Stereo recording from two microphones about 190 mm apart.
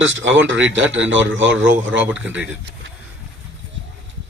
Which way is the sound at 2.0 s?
10° right (ahead or behind).